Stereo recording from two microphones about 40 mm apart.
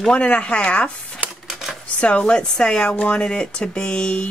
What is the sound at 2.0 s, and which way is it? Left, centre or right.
Speech, left.